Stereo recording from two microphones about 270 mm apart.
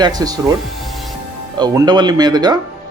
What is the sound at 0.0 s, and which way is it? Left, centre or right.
Speech, centre.